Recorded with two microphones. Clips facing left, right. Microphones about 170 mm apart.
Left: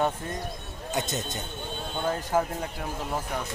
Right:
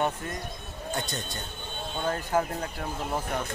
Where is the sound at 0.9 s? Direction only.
20° left (ahead or behind).